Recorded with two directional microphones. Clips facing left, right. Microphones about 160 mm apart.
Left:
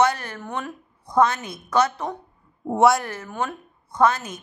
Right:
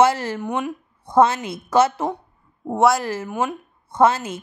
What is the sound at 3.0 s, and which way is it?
Speech, 25° right (ahead or behind).